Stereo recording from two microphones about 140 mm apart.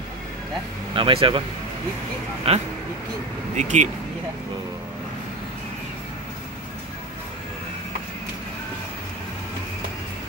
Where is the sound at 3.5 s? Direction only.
55° right (ahead or behind).